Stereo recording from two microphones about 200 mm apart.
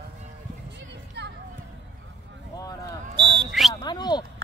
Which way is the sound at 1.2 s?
60° right (ahead or behind).